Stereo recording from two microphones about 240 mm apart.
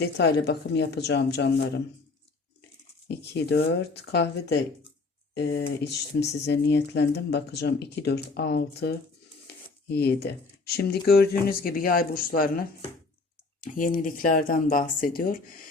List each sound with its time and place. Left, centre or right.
0.0 s speech: left
3.1 s speech: left
13.7 s speech: left